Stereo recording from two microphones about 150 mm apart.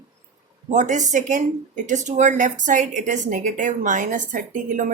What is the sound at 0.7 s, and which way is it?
Speech, 55° right (ahead or behind).